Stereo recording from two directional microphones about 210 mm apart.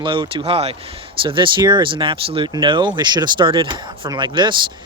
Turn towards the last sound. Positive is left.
turn(degrees=-20)  # may be behind; listen again after turning